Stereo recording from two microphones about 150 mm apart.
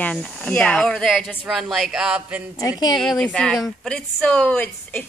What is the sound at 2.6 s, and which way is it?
Speech, 25° left (ahead or behind).